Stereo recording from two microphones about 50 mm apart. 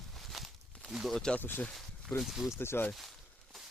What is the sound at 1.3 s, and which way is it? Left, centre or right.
Speech, left.